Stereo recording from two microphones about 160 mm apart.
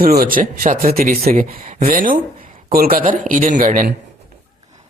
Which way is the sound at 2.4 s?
65° right (ahead or behind).